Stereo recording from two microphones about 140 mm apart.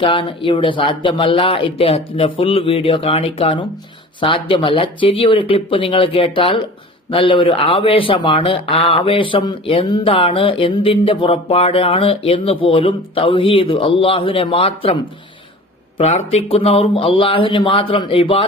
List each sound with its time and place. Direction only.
0.0 s speech: 40° left (ahead or behind)